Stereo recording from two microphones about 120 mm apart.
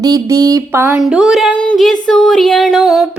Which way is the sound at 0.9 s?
5° right (ahead or behind).